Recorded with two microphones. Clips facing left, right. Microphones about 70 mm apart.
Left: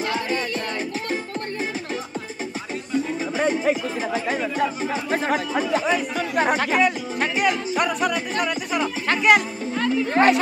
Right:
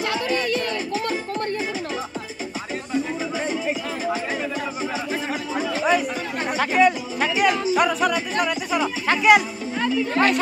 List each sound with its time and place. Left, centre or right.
3.3 s chatter: left
6.1 s chatter: left
6.8 s speech: centre
10.2 s speech: left